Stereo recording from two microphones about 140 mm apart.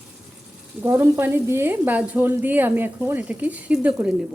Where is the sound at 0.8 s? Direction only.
15° right (ahead or behind).